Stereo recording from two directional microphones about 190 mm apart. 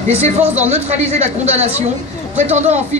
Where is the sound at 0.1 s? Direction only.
35° right (ahead or behind).